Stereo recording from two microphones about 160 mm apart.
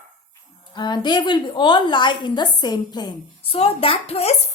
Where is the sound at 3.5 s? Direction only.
35° left (ahead or behind).